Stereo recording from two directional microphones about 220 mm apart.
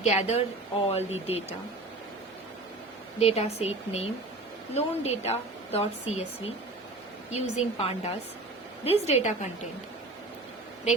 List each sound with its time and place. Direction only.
0.0 s speech: 30° left (ahead or behind)
3.2 s speech: 30° left (ahead or behind)
7.3 s speech: 30° left (ahead or behind)